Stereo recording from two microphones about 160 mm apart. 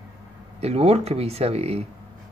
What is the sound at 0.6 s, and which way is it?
Speech, 40° right (ahead or behind).